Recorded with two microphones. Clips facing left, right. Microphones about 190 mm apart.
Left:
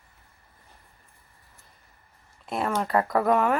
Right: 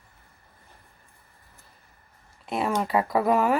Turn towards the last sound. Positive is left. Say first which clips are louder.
# even
turn(degrees=-5)  # may be behind; listen again after turning